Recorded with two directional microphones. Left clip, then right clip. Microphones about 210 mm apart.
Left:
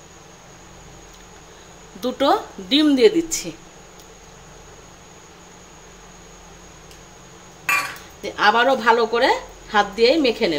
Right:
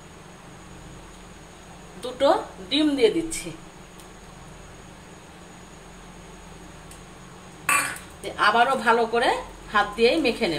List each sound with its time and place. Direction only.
2.0 s a woman's voice: 50° left (ahead or behind)
8.4 s a woman's voice: 40° left (ahead or behind)